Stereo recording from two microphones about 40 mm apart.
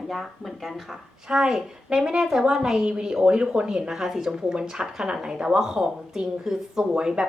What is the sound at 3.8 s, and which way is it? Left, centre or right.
A woman's voice, centre.